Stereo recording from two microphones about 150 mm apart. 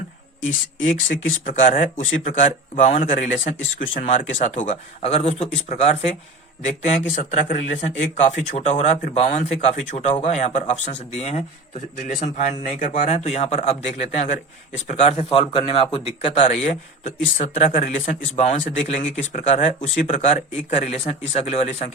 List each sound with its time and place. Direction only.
1.5 s speech: 60° left (ahead or behind)